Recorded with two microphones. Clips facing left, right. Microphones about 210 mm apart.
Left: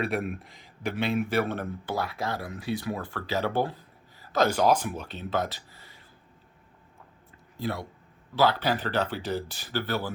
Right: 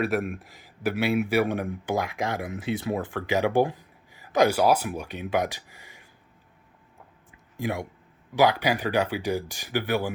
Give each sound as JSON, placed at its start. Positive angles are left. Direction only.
{"t": 0.0, "sound": "a man's voice", "side_deg": 0}
{"t": 7.3, "sound": "a sound", "side_deg": -15}
{"t": 8.4, "sound": "a man's voice", "side_deg": -15}